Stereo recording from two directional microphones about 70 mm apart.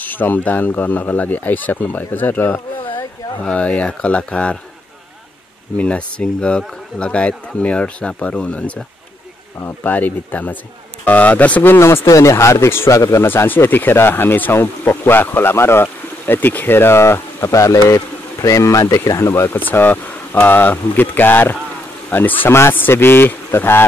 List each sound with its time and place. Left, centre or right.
0.0 s speech: left
3.3 s speech: centre
5.8 s speech: centre
9.6 s speech: left
9.9 s speech: left
12.1 s speech: left
13.3 s speech: left